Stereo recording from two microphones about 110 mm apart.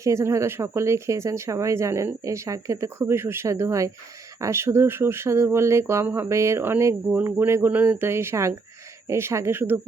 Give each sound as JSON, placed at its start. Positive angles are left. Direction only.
{"t": 0.0, "sound": "speech", "side_deg": -25}